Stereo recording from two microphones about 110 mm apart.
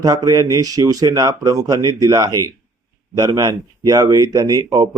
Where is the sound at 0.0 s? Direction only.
35° right (ahead or behind).